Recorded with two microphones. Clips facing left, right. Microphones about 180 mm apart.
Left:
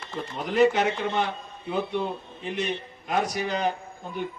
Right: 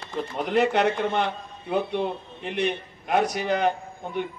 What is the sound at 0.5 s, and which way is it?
A man's voice, 60° right (ahead or behind).